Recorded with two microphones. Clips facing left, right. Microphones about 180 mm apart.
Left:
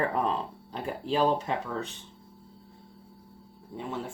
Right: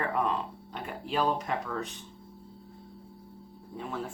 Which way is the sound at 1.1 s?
30° left (ahead or behind).